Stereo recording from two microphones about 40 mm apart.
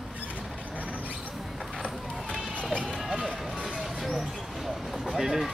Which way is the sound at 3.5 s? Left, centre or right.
Right.